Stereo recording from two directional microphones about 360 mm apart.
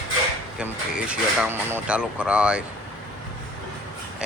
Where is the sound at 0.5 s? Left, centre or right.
Centre.